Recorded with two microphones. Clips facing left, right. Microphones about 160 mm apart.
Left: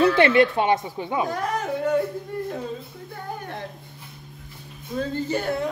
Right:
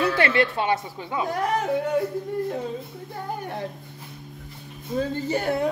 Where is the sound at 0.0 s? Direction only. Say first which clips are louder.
Left 5 dB; 20° left (ahead or behind).